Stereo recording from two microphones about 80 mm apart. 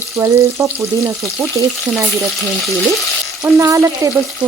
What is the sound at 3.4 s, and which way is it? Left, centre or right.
Speech, right.